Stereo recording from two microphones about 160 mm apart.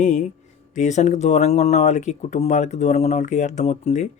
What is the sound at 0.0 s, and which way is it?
Speech, 50° left (ahead or behind).